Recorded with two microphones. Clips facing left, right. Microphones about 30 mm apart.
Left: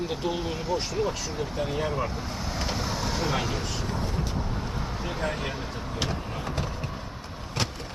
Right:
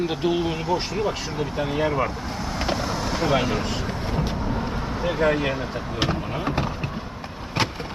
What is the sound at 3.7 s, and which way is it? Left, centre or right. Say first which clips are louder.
Vehicle: right 3 dB; right.